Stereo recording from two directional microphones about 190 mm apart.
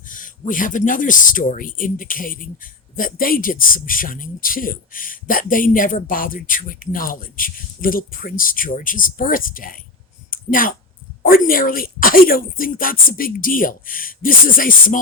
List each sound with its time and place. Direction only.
0.1 s speech: 45° left (ahead or behind)